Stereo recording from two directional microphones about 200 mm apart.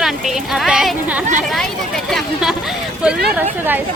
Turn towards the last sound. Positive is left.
turn(degrees=-10)  # may be behind; listen again after turning